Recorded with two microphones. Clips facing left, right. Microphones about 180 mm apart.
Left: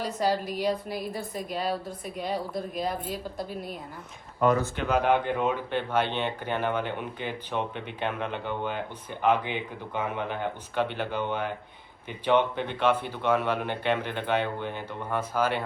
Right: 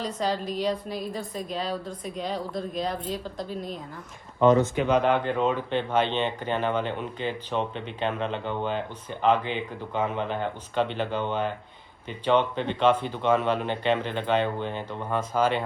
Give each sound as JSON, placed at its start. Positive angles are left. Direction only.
{"t": 0.0, "sound": "speech", "side_deg": 10}
{"t": 4.4, "sound": "speech", "side_deg": -25}
{"t": 4.9, "sound": "speech", "side_deg": 10}